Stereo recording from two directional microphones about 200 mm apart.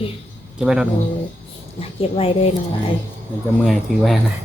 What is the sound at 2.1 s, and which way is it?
Speech, 30° left (ahead or behind).